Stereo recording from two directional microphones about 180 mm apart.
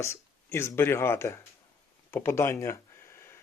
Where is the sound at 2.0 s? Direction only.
15° left (ahead or behind).